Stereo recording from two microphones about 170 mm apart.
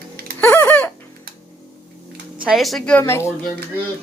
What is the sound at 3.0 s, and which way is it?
Speech, 15° left (ahead or behind).